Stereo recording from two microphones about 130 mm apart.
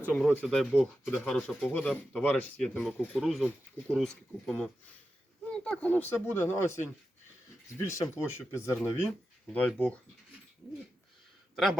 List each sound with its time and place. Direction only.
0.4 s speech: centre (ahead or behind); by 8.8 s 20° left (ahead or behind)
8.8 s speech: 5° right (ahead or behind)
9.5 s speech: 10° left (ahead or behind)
11.5 s speech: centre (ahead or behind)